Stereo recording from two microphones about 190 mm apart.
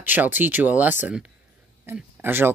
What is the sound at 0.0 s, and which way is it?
Speech, 10° right (ahead or behind).